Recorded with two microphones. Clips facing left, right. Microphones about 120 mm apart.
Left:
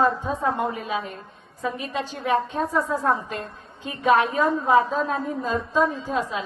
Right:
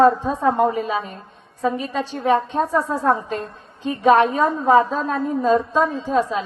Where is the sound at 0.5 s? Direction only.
40° right (ahead or behind).